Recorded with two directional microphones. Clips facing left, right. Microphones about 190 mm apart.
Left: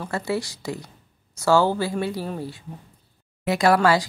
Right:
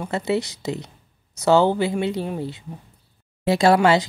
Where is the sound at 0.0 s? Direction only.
20° right (ahead or behind).